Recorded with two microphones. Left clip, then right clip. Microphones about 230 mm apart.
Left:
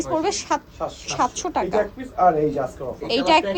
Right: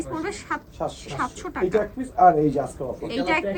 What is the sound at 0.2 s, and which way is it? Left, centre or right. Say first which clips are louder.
A woman's voice: left 6 dB; centre.